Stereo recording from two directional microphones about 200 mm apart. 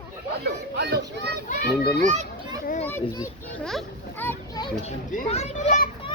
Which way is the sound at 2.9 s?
15° left (ahead or behind).